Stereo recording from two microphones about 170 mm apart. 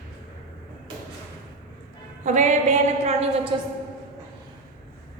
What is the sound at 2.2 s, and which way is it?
A woman's voice, 45° right (ahead or behind).